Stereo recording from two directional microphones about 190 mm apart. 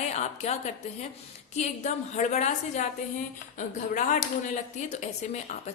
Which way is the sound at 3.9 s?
40° left (ahead or behind).